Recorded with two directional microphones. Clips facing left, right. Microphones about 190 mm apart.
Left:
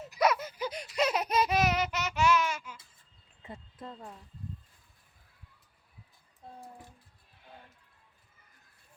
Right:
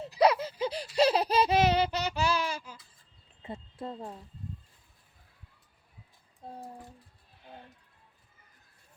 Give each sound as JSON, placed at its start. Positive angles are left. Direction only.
{"t": 0.0, "sound": "baby laughter", "side_deg": -30}
{"t": 3.4, "sound": "speech", "side_deg": -30}